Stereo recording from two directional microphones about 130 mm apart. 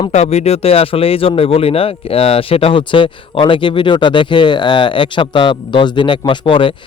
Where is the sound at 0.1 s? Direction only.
55° left (ahead or behind).